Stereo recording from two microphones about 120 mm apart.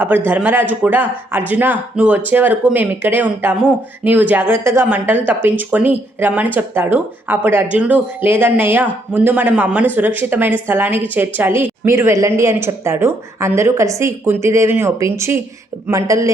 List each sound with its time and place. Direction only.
0.3 s speech: 15° right (ahead or behind)